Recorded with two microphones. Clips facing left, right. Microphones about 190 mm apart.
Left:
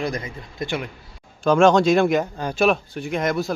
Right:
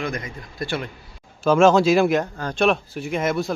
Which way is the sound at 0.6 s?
15° left (ahead or behind).